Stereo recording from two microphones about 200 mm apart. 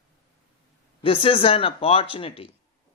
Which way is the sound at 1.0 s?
25° left (ahead or behind).